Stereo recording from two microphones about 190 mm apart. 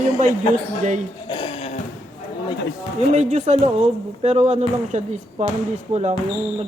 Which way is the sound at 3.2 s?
40° right (ahead or behind).